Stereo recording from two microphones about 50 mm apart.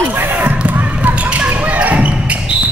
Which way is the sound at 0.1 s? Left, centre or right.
Right.